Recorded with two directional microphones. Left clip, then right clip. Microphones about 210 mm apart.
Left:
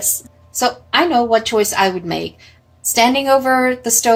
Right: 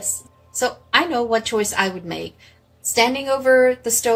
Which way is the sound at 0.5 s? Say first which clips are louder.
Left 3 dB; centre (ahead or behind).